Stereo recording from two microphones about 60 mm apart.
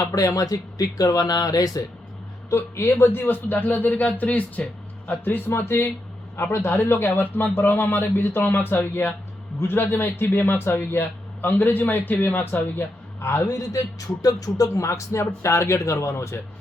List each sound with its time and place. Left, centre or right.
0.1 s speech: left
2.5 s speech: left
11.4 s speech: left
13.6 s speech: left